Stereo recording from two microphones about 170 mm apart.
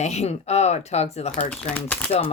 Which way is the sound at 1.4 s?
10° left (ahead or behind).